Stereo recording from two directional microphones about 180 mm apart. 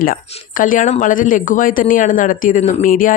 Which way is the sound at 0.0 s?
50° left (ahead or behind).